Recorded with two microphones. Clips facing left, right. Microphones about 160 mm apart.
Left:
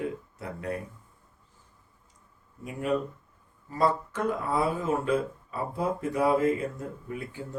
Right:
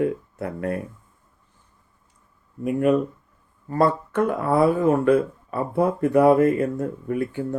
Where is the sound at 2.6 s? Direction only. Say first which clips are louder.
Right 9 dB; 60° right (ahead or behind).